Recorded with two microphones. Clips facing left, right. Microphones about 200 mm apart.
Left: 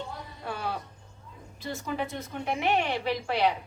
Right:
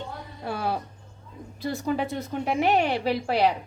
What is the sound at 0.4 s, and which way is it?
Music, 35° right (ahead or behind).